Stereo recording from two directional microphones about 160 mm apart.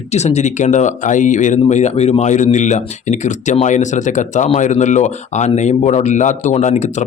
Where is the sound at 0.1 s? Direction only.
45° left (ahead or behind).